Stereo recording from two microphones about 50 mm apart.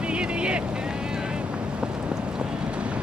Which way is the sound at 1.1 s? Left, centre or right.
Centre.